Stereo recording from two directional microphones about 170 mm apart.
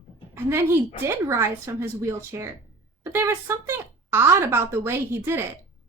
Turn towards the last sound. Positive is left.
turn(degrees=-15)  # may be behind; listen again after turning